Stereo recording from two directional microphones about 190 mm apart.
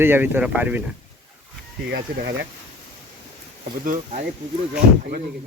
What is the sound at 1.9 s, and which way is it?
Speech, 60° right (ahead or behind).